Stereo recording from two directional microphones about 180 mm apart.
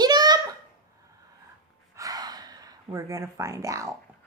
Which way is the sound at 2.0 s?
20° right (ahead or behind).